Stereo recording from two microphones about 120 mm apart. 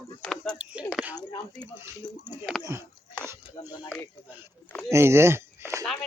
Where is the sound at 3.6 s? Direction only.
35° left (ahead or behind).